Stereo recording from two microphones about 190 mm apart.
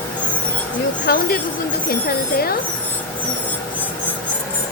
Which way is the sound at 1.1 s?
55° left (ahead or behind).